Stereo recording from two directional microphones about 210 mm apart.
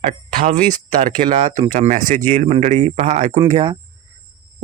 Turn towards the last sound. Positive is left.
turn(degrees=-25)  # may be behind; listen again after turning